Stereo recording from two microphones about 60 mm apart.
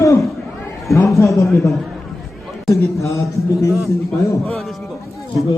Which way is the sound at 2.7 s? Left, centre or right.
Left.